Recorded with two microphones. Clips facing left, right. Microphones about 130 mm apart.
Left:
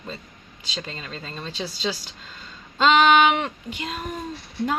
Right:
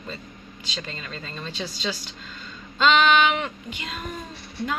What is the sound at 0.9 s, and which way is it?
Speech, 30° left (ahead or behind).